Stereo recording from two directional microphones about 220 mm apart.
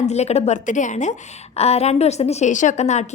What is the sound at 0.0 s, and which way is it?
A woman's voice, 30° left (ahead or behind).